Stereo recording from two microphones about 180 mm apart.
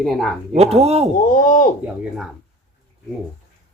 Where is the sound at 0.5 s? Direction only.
35° right (ahead or behind).